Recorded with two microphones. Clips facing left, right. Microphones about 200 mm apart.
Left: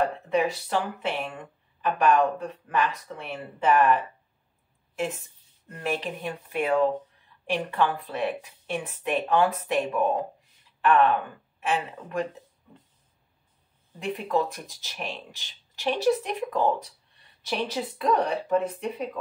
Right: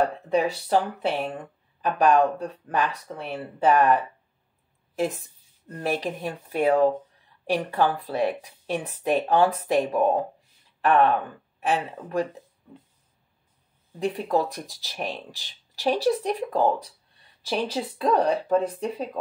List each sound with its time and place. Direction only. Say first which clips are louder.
0.0 s a woman's voice: right 2 dB; 35° right (ahead or behind)
13.9 s speech: right 2 dB; 35° right (ahead or behind)